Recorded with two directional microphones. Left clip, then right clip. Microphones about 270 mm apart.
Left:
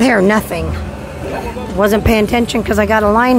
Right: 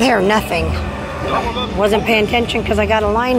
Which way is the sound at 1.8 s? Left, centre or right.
Left.